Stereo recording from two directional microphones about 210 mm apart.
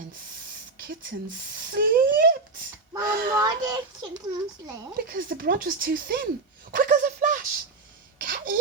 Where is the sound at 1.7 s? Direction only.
45° right (ahead or behind).